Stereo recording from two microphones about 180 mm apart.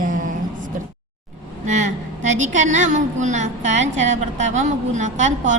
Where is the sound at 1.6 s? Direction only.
40° right (ahead or behind).